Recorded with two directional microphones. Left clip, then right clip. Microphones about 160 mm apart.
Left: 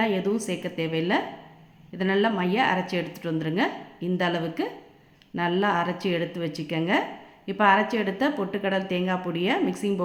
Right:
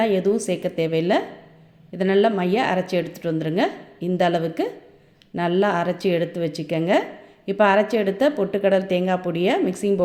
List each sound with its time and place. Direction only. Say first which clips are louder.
0.0 s a woman's voice: right 6 dB; 25° right (ahead or behind)